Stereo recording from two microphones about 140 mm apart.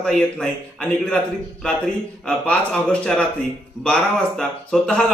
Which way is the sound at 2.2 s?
10° left (ahead or behind).